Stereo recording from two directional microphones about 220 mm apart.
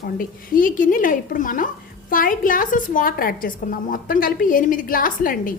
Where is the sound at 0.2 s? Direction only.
40° left (ahead or behind).